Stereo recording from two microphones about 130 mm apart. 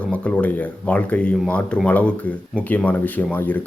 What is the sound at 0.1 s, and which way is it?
Speech, 10° left (ahead or behind).